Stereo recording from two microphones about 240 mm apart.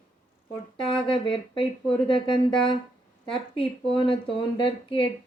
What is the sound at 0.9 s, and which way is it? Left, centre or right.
Speech, left.